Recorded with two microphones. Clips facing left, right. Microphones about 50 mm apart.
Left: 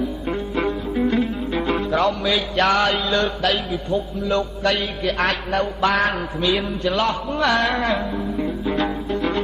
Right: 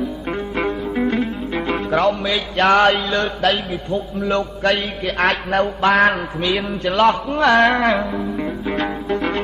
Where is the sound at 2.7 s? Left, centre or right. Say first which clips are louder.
Right 4 dB; right.